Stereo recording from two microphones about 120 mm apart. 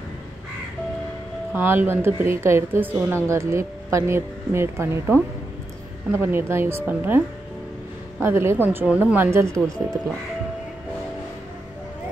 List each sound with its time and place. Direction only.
1.5 s speech: 15° right (ahead or behind)
8.2 s speech: 20° right (ahead or behind)